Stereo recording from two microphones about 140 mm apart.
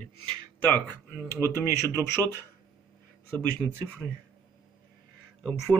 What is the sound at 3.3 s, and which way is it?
Speech, 10° left (ahead or behind).